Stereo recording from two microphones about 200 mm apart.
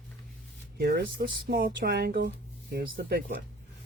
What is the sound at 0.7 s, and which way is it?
Speech, 50° right (ahead or behind).